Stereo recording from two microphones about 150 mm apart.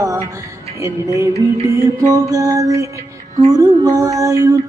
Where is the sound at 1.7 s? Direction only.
20° right (ahead or behind).